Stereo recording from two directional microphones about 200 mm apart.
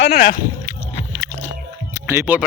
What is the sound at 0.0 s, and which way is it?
Speech, 50° left (ahead or behind).